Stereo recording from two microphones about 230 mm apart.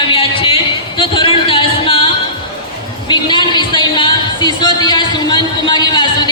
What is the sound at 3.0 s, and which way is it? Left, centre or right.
Music, centre.